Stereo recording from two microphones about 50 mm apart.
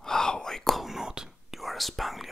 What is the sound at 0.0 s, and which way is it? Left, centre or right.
Whispering, centre.